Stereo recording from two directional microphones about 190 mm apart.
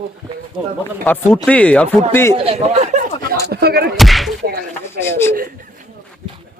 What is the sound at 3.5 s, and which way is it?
Speech, 55° right (ahead or behind).